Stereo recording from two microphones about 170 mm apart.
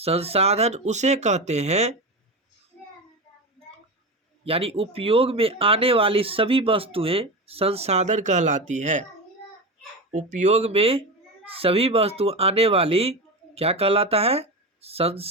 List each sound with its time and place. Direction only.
0.0 s speech: 35° right (ahead or behind)
4.4 s speech: 35° right (ahead or behind)
10.1 s speech: 45° right (ahead or behind)